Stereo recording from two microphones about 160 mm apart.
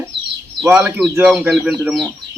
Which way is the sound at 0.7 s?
5° right (ahead or behind).